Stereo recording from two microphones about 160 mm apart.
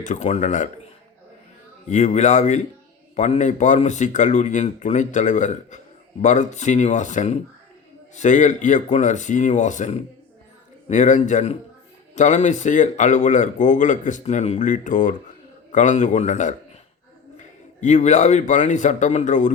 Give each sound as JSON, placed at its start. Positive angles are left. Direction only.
{"t": 0.0, "sound": "speech", "side_deg": 50}
{"t": 1.9, "sound": "speech", "side_deg": 50}
{"t": 17.7, "sound": "speech", "side_deg": 45}